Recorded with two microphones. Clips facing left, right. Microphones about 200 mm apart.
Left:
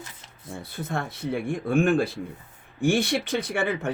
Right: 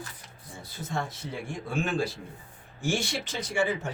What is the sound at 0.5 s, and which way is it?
A man's voice, 60° left (ahead or behind).